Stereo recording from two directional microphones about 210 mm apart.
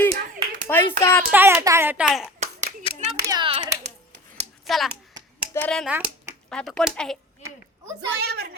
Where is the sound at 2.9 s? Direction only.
25° left (ahead or behind).